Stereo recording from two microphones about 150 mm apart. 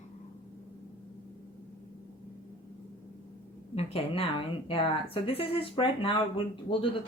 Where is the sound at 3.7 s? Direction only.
40° left (ahead or behind).